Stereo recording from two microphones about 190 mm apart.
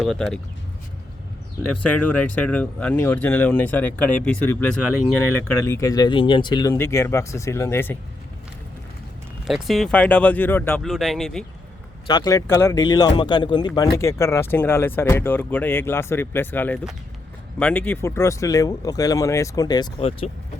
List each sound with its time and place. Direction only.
0.0 s speech: centre (ahead or behind)
1.8 s speech: 10° left (ahead or behind)
9.5 s speech: centre (ahead or behind)
10.8 s speech: centre (ahead or behind)
12.0 s speech: 20° left (ahead or behind)